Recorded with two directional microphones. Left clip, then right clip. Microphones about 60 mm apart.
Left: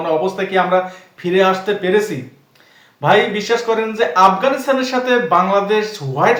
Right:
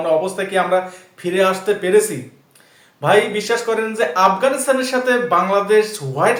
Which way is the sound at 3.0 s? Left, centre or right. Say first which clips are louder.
Left 1 dB; right.